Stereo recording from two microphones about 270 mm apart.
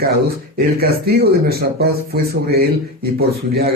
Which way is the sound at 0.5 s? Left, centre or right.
Right.